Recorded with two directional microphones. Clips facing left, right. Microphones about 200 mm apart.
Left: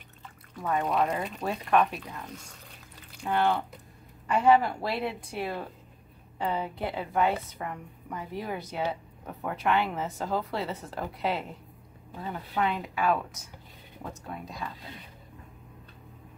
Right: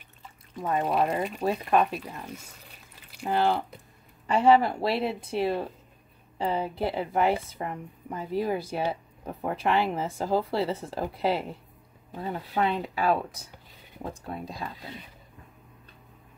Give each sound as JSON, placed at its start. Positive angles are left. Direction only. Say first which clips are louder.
{"t": 0.6, "sound": "a woman's voice", "louder": "right 1 dB", "side_deg": -25}
{"t": 3.3, "sound": "a woman's voice", "louder": "right 1 dB", "side_deg": -30}